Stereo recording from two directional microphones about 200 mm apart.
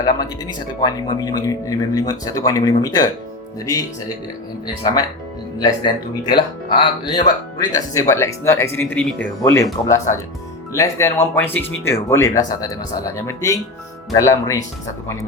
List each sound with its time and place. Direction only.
0.0 s speech: 20° left (ahead or behind)
4.6 s speech: 20° left (ahead or behind)
10.7 s speech: 15° left (ahead or behind)